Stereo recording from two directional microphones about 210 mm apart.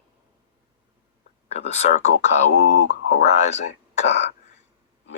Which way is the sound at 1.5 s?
30° left (ahead or behind).